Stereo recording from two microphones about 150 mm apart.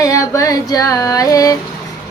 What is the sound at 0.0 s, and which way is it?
Child singing, 20° left (ahead or behind).